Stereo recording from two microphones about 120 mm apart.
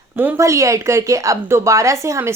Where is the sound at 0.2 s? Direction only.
20° right (ahead or behind).